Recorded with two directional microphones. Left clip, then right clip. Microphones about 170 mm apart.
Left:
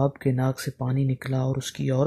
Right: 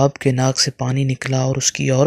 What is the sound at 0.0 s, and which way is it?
Speech, 30° right (ahead or behind).